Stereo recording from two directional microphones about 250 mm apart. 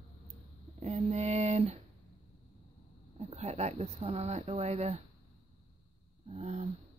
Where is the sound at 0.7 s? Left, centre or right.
Right.